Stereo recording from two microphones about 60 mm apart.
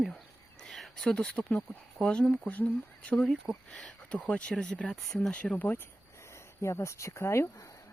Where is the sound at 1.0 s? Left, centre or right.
Centre.